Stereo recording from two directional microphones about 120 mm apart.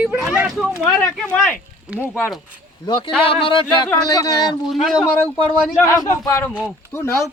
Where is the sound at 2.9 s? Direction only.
40° left (ahead or behind).